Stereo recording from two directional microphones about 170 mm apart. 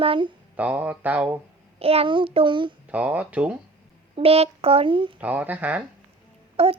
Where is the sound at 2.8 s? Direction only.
10° right (ahead or behind).